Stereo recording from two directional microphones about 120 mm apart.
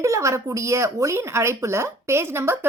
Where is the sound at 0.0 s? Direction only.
25° right (ahead or behind).